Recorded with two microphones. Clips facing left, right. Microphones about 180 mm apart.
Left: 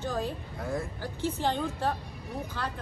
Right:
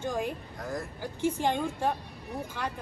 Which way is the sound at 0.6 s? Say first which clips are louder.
Left 3 dB; centre (ahead or behind).